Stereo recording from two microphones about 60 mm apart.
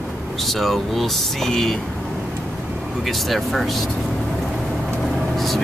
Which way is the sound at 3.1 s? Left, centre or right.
Centre.